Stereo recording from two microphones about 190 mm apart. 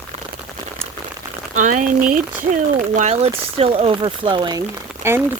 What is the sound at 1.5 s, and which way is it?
Speech, 40° right (ahead or behind).